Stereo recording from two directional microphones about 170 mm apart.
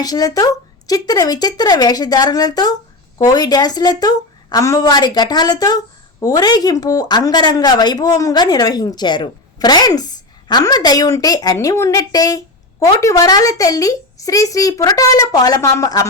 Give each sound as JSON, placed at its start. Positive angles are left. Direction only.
{"t": 0.0, "sound": "a woman's voice", "side_deg": 20}